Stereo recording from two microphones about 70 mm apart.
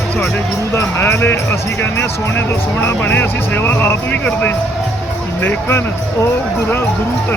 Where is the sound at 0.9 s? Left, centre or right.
Left.